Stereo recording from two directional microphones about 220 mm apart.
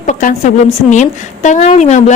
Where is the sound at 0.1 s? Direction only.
35° left (ahead or behind).